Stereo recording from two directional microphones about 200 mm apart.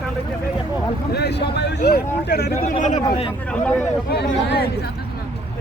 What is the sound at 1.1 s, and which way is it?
Speech, 55° left (ahead or behind).